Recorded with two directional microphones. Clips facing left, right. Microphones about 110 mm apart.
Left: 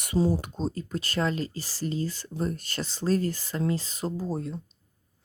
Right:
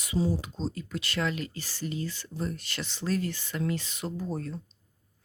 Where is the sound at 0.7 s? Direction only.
40° left (ahead or behind).